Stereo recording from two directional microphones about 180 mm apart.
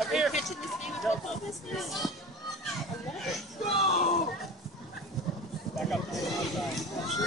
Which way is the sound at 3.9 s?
35° left (ahead or behind).